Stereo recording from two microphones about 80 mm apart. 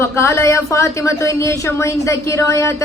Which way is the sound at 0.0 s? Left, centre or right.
Left.